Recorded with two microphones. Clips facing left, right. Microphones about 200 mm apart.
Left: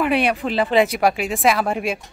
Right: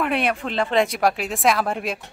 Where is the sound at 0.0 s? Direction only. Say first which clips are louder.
Left 3 dB; centre (ahead or behind).